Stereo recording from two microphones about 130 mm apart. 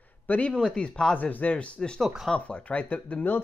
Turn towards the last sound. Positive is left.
turn(degrees=10)  # may be behind; listen again after turning